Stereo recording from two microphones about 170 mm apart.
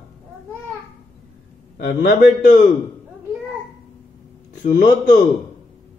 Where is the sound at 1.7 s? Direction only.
65° left (ahead or behind).